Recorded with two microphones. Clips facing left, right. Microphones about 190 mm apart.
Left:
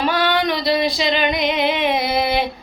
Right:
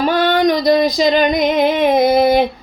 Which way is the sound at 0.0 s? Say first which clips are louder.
Right 5 dB; 45° right (ahead or behind).